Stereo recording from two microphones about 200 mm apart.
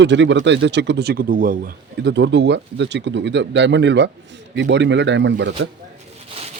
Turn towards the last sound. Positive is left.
turn(degrees=-60)  # may be behind; listen again after turning